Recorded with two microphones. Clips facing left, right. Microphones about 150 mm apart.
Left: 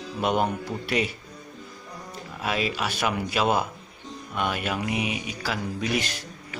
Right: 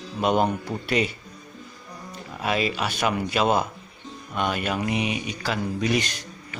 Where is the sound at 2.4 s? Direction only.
Centre (ahead or behind).